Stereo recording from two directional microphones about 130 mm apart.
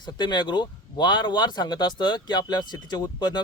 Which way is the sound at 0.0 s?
35° left (ahead or behind).